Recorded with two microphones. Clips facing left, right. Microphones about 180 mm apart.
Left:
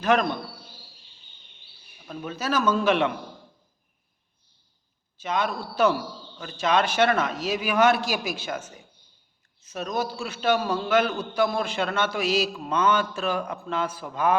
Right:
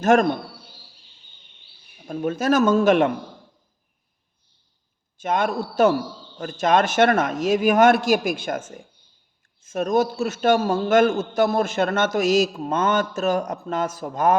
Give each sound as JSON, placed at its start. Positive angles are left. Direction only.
{"t": 0.0, "sound": "a man's voice", "side_deg": -45}
{"t": 2.0, "sound": "a man's voice", "side_deg": -50}
{"t": 5.1, "sound": "a man's voice", "side_deg": -50}